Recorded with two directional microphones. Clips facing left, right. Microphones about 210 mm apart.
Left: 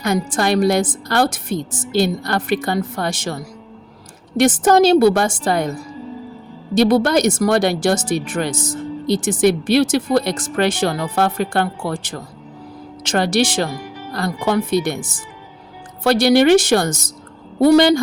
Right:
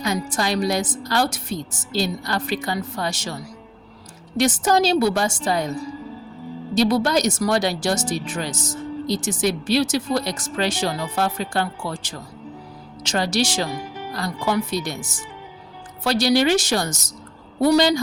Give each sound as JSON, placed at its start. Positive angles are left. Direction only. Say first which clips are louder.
{"t": 0.0, "sound": "a woman's voice", "louder": "left 5 dB", "side_deg": 55}
{"t": 6.7, "sound": "speech", "louder": "left 5 dB", "side_deg": 55}